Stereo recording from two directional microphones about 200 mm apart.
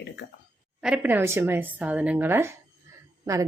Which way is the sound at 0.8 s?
5° right (ahead or behind).